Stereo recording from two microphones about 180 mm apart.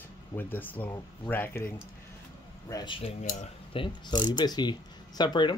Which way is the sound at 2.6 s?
25° left (ahead or behind).